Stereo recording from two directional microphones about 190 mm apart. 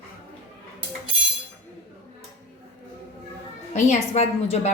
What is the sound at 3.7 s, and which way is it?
Speech, 35° left (ahead or behind).